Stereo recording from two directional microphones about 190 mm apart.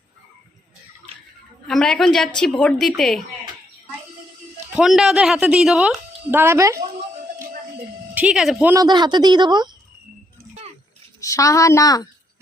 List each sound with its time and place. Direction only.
1.6 s a woman's voice: centre (ahead or behind)
4.7 s a woman's voice: 5° right (ahead or behind)
8.1 s a woman's voice: 5° right (ahead or behind)
8.7 s a woman's voice: 20° right (ahead or behind)
11.2 s a woman's voice: 15° left (ahead or behind)